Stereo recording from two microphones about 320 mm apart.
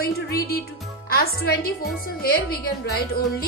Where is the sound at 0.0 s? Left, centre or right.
Left.